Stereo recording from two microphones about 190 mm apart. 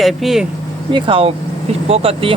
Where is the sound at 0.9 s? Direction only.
30° right (ahead or behind).